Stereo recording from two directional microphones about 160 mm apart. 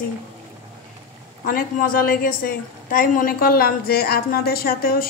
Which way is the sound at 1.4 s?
60° left (ahead or behind).